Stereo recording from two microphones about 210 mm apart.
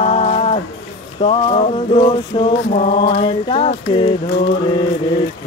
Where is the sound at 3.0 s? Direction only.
25° left (ahead or behind).